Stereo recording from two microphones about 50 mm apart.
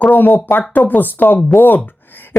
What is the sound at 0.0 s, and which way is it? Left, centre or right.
A woman's voice, left.